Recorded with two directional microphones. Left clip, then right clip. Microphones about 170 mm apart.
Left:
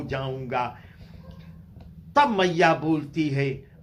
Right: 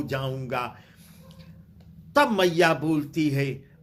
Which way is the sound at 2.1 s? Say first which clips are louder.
Left 1 dB; 40° right (ahead or behind).